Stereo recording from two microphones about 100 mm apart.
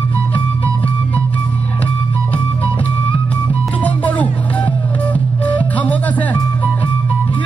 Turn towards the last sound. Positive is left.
turn(degrees=15)  # may be behind; listen again after turning